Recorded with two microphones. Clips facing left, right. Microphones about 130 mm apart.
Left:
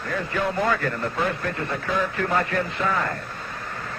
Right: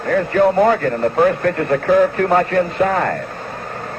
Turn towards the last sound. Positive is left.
turn(degrees=-55)  # may be behind; listen again after turning